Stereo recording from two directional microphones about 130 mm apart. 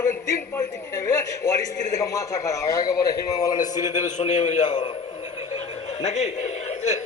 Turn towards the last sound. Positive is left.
turn(degrees=60)  # may be behind; listen again after turning